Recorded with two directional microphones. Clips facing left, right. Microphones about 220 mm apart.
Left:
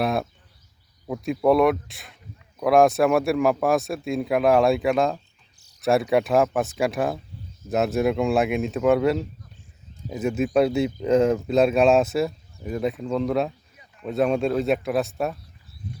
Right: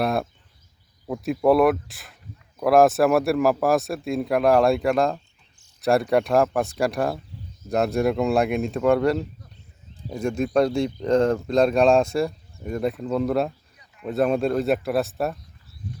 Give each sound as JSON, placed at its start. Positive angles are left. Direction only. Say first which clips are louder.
{"t": 0.0, "sound": "speech", "louder": "even", "side_deg": 0}